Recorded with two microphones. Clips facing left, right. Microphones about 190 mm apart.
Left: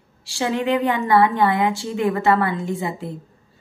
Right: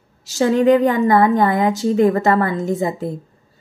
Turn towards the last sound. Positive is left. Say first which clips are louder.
# right 5 dB
turn(degrees=-40)  # may be behind; listen again after turning